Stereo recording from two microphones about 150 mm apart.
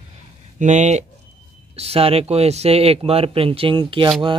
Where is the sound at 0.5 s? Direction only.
50° right (ahead or behind).